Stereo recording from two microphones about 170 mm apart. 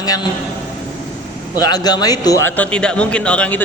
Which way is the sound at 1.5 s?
25° left (ahead or behind).